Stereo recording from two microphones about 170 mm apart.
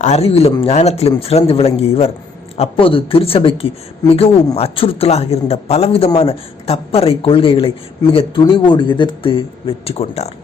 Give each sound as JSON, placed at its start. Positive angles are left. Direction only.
{"t": 0.0, "sound": "speech", "side_deg": 40}